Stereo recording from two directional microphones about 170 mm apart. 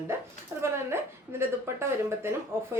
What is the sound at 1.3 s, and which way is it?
A woman's voice, 15° right (ahead or behind).